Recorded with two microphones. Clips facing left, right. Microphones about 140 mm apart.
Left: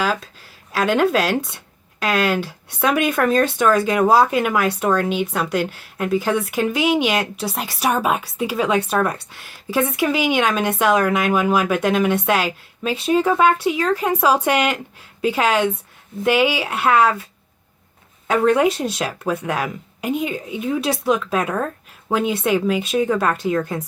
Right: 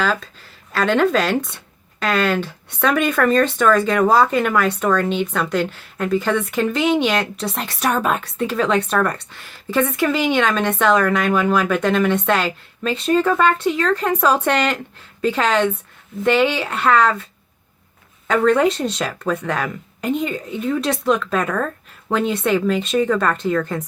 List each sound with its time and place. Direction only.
0.0 s speech: 10° left (ahead or behind)
18.3 s speech: 15° left (ahead or behind)
21.4 s speech: 20° left (ahead or behind)
22.1 s speech: 5° left (ahead or behind)